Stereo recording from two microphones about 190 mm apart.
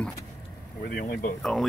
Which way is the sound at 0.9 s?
45° left (ahead or behind).